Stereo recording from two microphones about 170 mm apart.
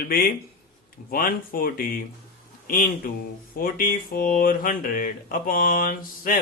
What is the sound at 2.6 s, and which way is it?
Speech, 55° left (ahead or behind).